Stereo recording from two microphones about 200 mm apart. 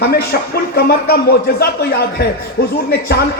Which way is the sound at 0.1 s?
50° left (ahead or behind).